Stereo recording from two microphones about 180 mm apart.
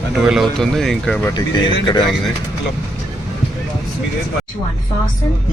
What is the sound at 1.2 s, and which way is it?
Speech, 25° left (ahead or behind).